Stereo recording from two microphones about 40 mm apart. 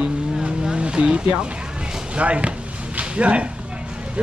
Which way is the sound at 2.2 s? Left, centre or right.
Right.